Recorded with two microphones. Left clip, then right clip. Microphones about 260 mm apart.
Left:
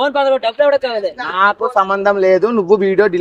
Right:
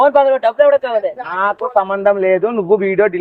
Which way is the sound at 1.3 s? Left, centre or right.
Centre.